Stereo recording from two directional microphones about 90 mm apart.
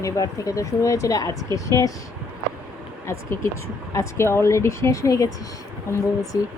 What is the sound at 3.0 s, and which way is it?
Speech, 30° left (ahead or behind).